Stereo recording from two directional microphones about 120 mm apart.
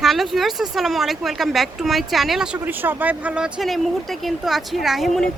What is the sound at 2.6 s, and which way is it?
Speech, 15° right (ahead or behind).